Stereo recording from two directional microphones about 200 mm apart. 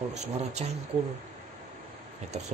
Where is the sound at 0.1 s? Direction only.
35° right (ahead or behind).